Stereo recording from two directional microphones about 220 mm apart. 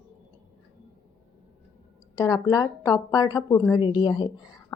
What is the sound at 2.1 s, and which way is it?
A woman's voice, 15° left (ahead or behind).